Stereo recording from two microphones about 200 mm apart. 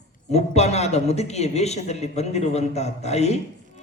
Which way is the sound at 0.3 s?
35° left (ahead or behind).